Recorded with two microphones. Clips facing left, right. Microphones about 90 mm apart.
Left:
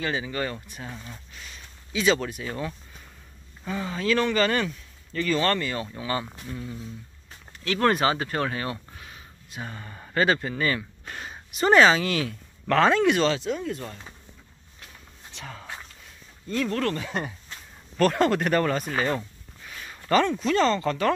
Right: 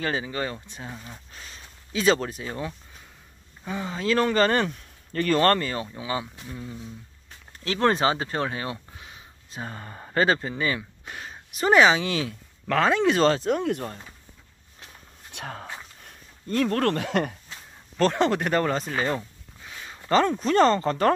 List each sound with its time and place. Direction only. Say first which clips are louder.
0.0 s speech: right 1 dB; 35° right (ahead or behind)
0.3 s speech: even; 25° right (ahead or behind)
2.4 s speech: even; 20° right (ahead or behind); by 5.2 s 40° right (ahead or behind)
5.2 s speech: right 4 dB; 50° right (ahead or behind)
5.9 s speech: left 1 dB; 10° right (ahead or behind)
9.5 s speech: right 1 dB; 35° right (ahead or behind); by 11.1 s 15° right (ahead or behind)
11.1 s speech: left 3 dB; centre (ahead or behind); by 12.4 s 25° right (ahead or behind)
12.6 s speech: left 2 dB; 5° right (ahead or behind)
13.0 s speech: right 2 dB; 35° right (ahead or behind)
13.6 s speech: right 5 dB; 60° right (ahead or behind)
15.3 s speech: right 3 dB; 55° right (ahead or behind)
17.9 s speech: left 1 dB; 20° right (ahead or behind)
19.1 s a sound: even; 20° right (ahead or behind)
20.2 s speech: right 3 dB; 40° right (ahead or behind)